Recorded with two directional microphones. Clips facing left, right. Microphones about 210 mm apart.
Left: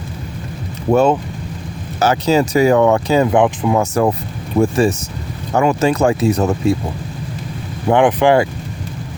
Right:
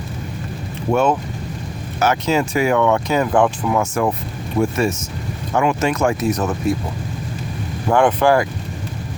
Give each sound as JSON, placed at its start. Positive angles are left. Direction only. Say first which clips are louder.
{"t": 0.9, "sound": "speech", "louder": "left 4 dB", "side_deg": 30}
{"t": 3.3, "sound": "speech", "louder": "left 3 dB", "side_deg": 20}
{"t": 3.8, "sound": "speech", "louder": "left 3 dB", "side_deg": 35}
{"t": 7.9, "sound": "speech", "louder": "left 3 dB", "side_deg": 20}